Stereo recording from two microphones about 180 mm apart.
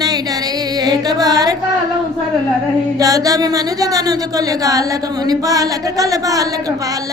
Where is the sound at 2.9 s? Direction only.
20° right (ahead or behind).